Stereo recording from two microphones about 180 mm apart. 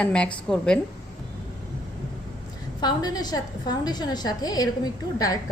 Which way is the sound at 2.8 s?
20° left (ahead or behind).